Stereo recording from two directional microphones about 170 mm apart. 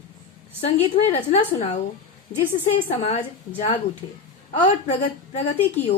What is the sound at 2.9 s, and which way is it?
A woman's voice, 35° left (ahead or behind).